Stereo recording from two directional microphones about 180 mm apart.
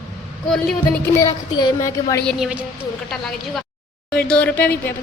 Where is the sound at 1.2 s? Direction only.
20° left (ahead or behind).